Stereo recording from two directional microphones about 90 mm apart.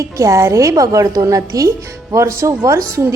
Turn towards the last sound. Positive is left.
turn(degrees=-35)  # may be behind; listen again after turning